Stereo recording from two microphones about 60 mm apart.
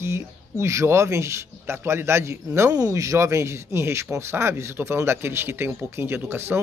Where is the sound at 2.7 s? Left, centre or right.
Right.